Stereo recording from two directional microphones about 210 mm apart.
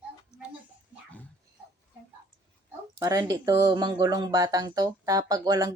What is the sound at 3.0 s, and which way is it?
Speech, 15° right (ahead or behind).